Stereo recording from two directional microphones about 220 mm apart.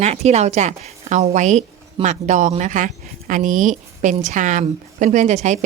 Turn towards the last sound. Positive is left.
turn(degrees=-30)  # may be behind; listen again after turning